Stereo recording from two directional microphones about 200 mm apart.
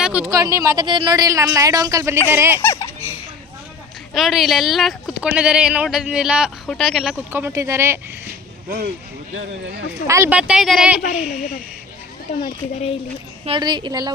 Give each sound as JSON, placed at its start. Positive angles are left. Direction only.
{"t": 0.0, "sound": "a sound", "side_deg": -5}
{"t": 0.3, "sound": "speech", "side_deg": -15}
{"t": 2.6, "sound": "speech", "side_deg": 15}
{"t": 4.1, "sound": "speech", "side_deg": 0}
{"t": 8.3, "sound": "vehicle", "side_deg": -50}
{"t": 10.1, "sound": "speech", "side_deg": -10}
{"t": 12.3, "sound": "a child's voice", "side_deg": 35}
{"t": 13.4, "sound": "a woman's voice", "side_deg": -25}